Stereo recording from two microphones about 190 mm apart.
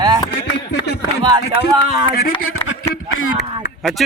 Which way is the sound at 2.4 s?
90° left.